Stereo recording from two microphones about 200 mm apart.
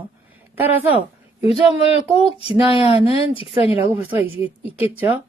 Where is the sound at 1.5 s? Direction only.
30° left (ahead or behind).